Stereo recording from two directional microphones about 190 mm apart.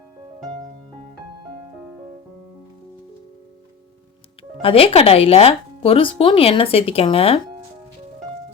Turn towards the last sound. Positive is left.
turn(degrees=30)  # may be behind; listen again after turning